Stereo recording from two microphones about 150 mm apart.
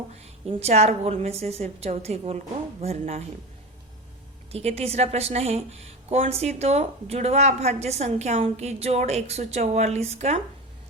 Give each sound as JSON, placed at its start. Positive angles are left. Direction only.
{"t": 0.4, "sound": "speech", "side_deg": -45}
{"t": 4.5, "sound": "speech", "side_deg": -40}